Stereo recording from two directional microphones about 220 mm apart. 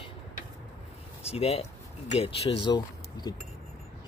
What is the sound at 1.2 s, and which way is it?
Speech, 25° left (ahead or behind).